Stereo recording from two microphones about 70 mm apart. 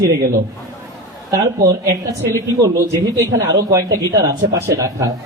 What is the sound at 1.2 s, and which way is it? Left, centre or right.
A man's voice, right.